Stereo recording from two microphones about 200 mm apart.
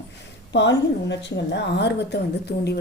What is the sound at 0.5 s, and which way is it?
A woman's voice, 60° left (ahead or behind).